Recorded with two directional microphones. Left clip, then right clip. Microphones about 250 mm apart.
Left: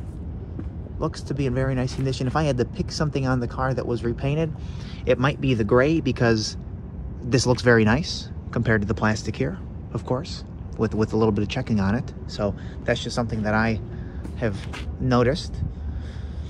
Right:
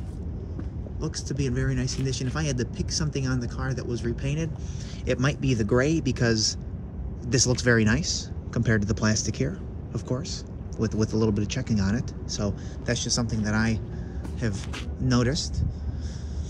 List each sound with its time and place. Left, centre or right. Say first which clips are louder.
0.9 s speech: left 5 dB; centre